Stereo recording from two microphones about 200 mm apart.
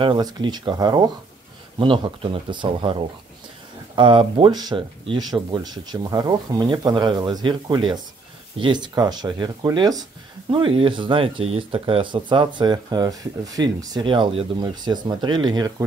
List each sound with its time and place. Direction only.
0.0 s speech: 25° right (ahead or behind)